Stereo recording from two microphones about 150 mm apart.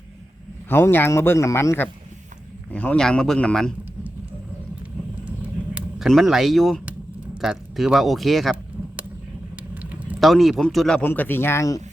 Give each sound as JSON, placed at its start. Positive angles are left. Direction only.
{"t": 0.7, "sound": "speech", "side_deg": 15}
{"t": 5.2, "sound": "vehicle", "side_deg": -10}
{"t": 6.1, "sound": "speech", "side_deg": 0}
{"t": 9.9, "sound": "speech", "side_deg": -5}